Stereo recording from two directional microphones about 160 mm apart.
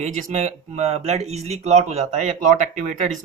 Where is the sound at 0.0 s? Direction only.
50° right (ahead or behind).